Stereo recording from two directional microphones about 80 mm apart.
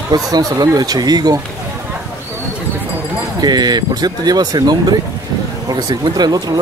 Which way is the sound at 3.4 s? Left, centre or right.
Right.